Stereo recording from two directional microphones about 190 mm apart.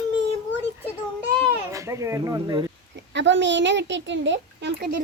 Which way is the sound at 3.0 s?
70° right (ahead or behind).